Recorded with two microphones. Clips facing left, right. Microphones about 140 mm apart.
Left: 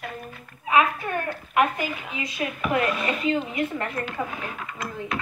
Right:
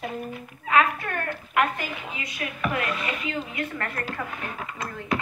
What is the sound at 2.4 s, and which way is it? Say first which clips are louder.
A woman's voice: left 4 dB; 25° left (ahead or behind).